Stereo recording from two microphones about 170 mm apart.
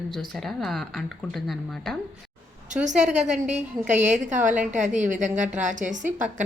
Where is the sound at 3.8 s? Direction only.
45° right (ahead or behind).